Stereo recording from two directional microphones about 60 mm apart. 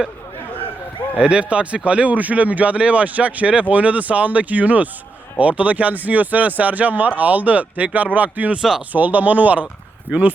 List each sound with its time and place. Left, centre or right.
1.2 s speech: centre